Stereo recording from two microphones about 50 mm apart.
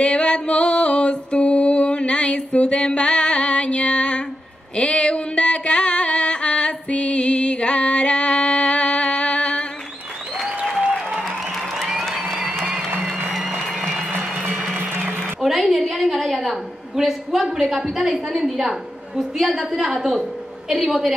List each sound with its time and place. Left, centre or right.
0.0 s music: left
4.7 s a sound: left
10.3 s applause: centre
11.2 s music: centre
13.7 s applause: centre
14.8 s music: right
15.4 s a woman's voice: centre